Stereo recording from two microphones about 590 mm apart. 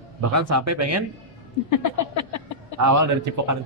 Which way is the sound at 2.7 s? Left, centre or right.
Right.